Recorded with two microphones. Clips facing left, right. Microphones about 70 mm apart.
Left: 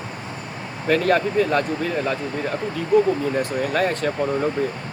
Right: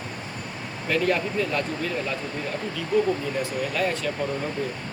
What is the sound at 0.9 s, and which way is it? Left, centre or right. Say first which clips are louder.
Speech: left 5 dB; left.